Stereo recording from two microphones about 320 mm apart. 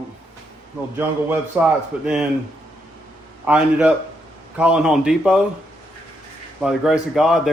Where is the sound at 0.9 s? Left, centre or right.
Centre.